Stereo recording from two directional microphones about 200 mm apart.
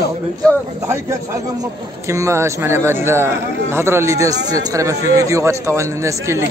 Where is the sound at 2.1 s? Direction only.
15° right (ahead or behind).